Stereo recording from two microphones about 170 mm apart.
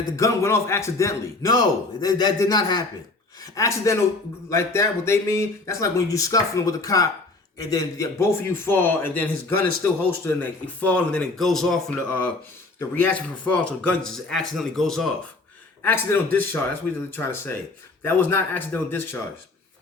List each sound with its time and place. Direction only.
0.2 s a man's voice: 15° left (ahead or behind); by 15.1 s centre (ahead or behind)
15.8 s speech: 10° left (ahead or behind)